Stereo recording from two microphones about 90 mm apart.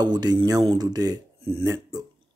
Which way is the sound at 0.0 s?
50° right (ahead or behind).